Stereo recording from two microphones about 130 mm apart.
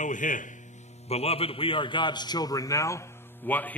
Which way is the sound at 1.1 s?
50° left (ahead or behind).